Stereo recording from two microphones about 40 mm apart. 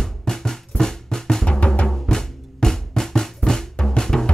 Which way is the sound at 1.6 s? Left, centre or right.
Left.